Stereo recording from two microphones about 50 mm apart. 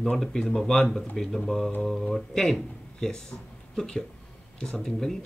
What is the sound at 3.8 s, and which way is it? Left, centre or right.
Speech, centre.